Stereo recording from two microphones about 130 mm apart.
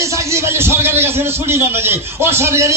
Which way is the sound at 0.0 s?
25° right (ahead or behind).